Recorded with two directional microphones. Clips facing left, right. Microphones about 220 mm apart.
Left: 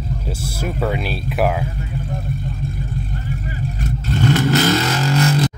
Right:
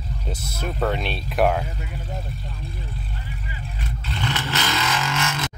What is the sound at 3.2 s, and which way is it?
Vehicle, 45° left (ahead or behind).